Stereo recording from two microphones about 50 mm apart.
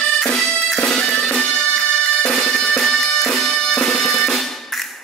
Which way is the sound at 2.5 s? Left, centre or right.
Left.